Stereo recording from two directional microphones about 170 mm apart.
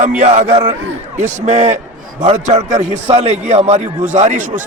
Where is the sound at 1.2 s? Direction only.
45° right (ahead or behind).